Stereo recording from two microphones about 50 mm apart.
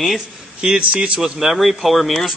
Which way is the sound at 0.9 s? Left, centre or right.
Right.